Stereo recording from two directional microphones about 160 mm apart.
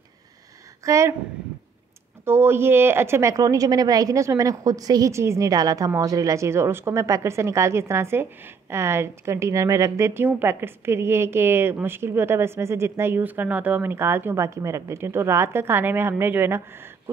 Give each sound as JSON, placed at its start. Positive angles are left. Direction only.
{"t": 0.8, "sound": "speech", "side_deg": -20}
{"t": 2.2, "sound": "a woman's voice", "side_deg": -15}